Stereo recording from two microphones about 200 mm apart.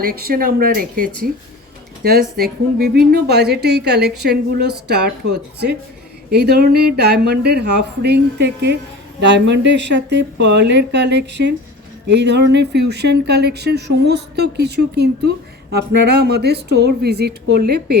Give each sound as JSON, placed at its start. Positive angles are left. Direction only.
{"t": 0.0, "sound": "speech", "side_deg": -50}
{"t": 6.3, "sound": "speech", "side_deg": -55}